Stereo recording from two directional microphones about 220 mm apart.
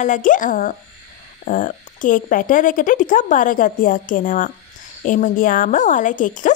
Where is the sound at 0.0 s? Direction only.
35° left (ahead or behind).